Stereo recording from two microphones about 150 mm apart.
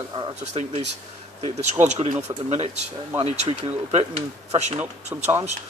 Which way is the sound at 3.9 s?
45° right (ahead or behind).